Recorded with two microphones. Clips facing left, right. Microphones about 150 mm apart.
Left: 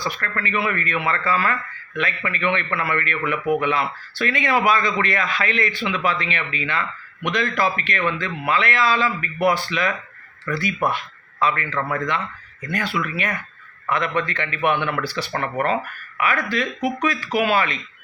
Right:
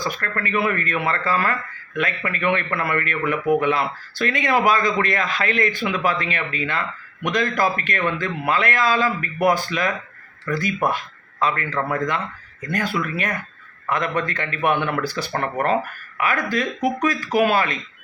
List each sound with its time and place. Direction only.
0.0 s a man's voice: 45° right (ahead or behind)